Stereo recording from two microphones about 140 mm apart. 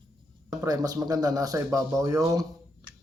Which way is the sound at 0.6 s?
25° right (ahead or behind).